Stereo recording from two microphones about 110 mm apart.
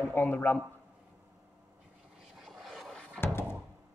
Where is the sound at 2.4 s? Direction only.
Centre (ahead or behind).